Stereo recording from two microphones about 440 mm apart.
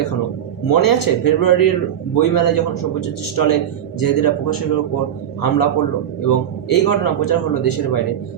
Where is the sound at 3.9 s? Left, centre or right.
Left.